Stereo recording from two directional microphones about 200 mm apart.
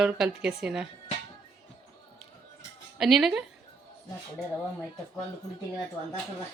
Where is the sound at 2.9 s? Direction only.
Centre (ahead or behind).